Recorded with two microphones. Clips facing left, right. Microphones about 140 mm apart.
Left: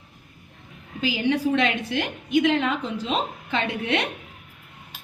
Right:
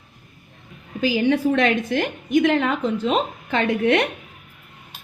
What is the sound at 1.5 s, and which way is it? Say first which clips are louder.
A woman's voice: right 4 dB; 50° right (ahead or behind).